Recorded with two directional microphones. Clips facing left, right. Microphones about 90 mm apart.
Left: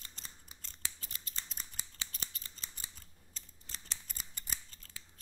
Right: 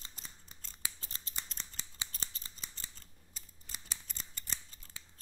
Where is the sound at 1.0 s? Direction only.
30° right (ahead or behind).